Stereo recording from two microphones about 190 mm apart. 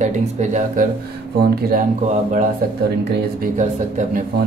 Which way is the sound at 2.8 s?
55° right (ahead or behind).